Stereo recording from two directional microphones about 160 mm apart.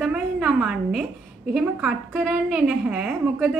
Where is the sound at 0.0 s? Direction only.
5° right (ahead or behind).